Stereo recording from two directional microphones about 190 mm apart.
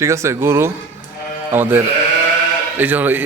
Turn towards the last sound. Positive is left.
turn(degrees=-10)  # may be behind; listen again after turning